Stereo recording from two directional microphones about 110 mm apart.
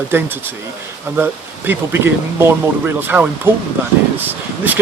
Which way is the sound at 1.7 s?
20° right (ahead or behind).